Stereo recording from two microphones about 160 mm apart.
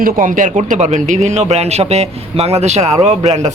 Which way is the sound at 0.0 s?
55° right (ahead or behind).